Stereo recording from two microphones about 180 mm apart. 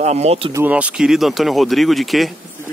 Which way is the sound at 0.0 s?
35° right (ahead or behind).